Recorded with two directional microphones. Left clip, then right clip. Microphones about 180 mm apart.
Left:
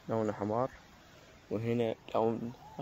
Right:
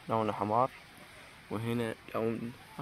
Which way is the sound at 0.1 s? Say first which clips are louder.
Right 3 dB; centre (ahead or behind).